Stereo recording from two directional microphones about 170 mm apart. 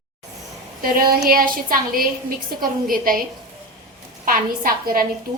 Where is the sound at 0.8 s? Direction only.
60° right (ahead or behind).